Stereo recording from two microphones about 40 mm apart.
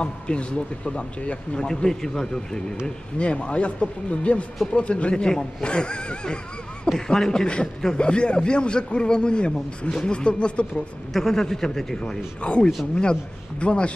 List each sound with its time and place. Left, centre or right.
0.0 s speech: left
1.7 s a man's voice: centre
3.2 s speech: left
5.1 s a man's voice: left
11.1 s a man's voice: centre
12.4 s speech: left